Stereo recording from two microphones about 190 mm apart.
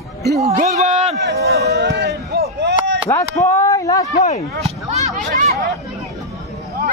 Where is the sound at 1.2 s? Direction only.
60° right (ahead or behind).